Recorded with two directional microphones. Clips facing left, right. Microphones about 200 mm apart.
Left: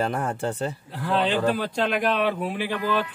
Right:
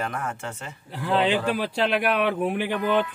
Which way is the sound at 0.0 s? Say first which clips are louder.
Left 5 dB; 30° left (ahead or behind).